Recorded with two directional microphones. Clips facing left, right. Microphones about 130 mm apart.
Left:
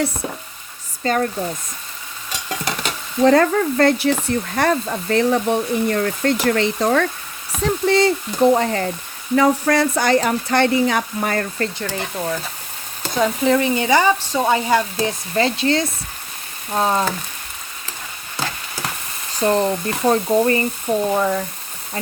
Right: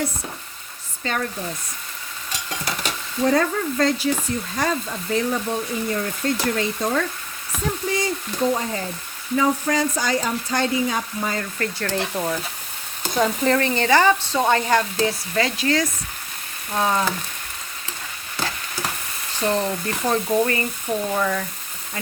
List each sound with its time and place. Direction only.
1.0 s speech: 40° left (ahead or behind)
3.2 s sizzle: 65° left (ahead or behind)
11.8 s speech: centre (ahead or behind)
13.1 s frying: centre (ahead or behind)
14.9 s speech: 30° left (ahead or behind)
19.4 s speech: 35° left (ahead or behind)